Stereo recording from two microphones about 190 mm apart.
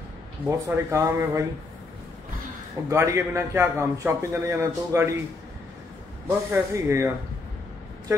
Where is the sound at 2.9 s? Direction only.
15° right (ahead or behind).